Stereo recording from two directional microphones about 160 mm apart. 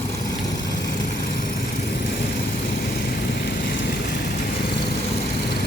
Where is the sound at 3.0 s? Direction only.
75° left (ahead or behind).